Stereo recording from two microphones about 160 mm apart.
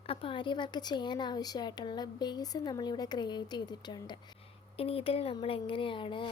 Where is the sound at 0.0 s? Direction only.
35° left (ahead or behind).